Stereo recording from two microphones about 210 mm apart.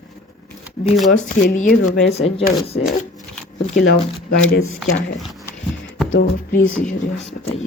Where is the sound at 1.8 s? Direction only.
60° left (ahead or behind).